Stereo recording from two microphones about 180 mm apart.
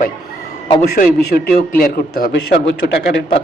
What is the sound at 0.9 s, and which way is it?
A man's voice, 50° left (ahead or behind).